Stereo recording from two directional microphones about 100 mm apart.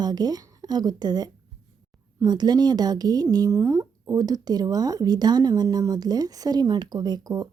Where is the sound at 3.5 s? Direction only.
30° right (ahead or behind).